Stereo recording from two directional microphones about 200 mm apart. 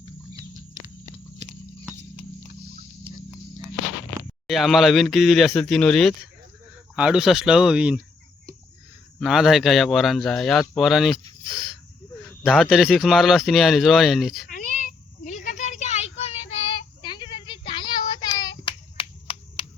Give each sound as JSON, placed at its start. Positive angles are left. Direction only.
{"t": 4.4, "sound": "a man's voice", "side_deg": 0}
{"t": 9.1, "sound": "a man's voice", "side_deg": 0}
{"t": 12.5, "sound": "a man's voice", "side_deg": 0}
{"t": 14.4, "sound": "a sound", "side_deg": 50}
{"t": 15.4, "sound": "child singing", "side_deg": 35}
{"t": 18.1, "sound": "hands", "side_deg": 20}